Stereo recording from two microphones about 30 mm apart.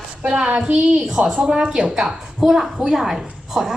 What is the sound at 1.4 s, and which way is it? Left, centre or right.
A woman's voice, right.